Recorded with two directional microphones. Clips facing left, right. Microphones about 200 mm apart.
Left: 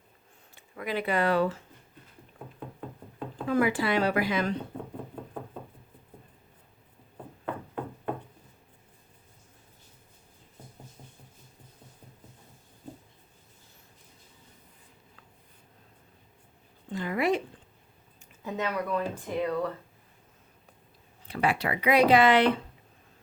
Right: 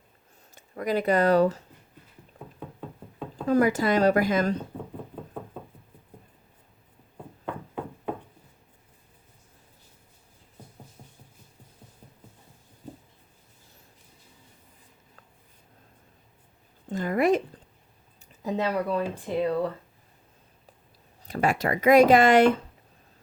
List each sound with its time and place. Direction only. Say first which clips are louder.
0.5 s speech: right 5 dB; 40° right (ahead or behind)
3.4 s speech: right 4 dB; 40° right (ahead or behind)
16.9 s a sound: right 4 dB; 45° right (ahead or behind)
18.4 s speech: right 4 dB; 35° right (ahead or behind)
21.2 s speech: right 3 dB; 45° right (ahead or behind)